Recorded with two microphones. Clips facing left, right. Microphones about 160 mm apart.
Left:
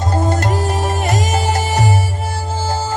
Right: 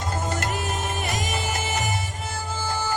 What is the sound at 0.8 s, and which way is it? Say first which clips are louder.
Music: left 9 dB; 75° left (ahead or behind).